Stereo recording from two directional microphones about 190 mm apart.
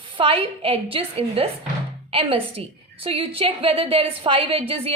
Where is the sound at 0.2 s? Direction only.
30° right (ahead or behind).